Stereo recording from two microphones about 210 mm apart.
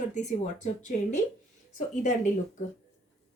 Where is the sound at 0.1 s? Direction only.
35° left (ahead or behind).